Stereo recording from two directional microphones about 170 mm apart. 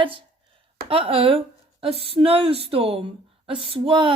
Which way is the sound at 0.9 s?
35° right (ahead or behind).